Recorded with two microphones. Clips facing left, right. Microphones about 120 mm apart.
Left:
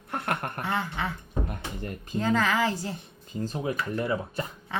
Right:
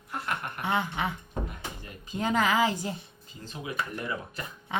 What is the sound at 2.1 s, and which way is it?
Speech, 15° right (ahead or behind).